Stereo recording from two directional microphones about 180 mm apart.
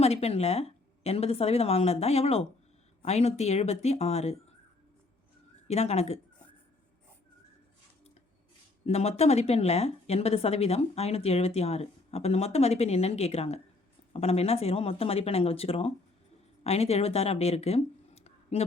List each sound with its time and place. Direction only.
0.0 s speech: 35° left (ahead or behind)
5.6 s speech: 35° left (ahead or behind)
8.9 s speech: 35° left (ahead or behind)